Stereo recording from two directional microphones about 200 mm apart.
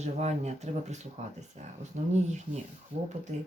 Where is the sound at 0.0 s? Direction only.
35° right (ahead or behind).